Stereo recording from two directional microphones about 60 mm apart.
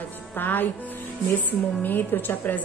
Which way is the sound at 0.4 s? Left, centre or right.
Left.